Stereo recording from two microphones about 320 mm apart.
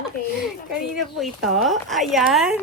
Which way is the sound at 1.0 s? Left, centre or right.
Centre.